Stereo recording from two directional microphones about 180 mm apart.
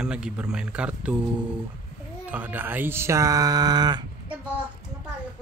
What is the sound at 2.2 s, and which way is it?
Speech, 10° right (ahead or behind).